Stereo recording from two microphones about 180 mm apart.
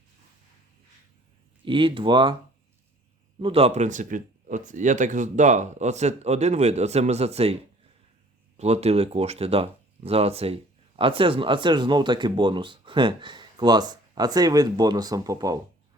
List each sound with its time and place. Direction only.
1.6 s speech: 30° right (ahead or behind)
3.4 s speech: 35° right (ahead or behind)
8.5 s speech: 35° right (ahead or behind); by 15.5 s 20° right (ahead or behind)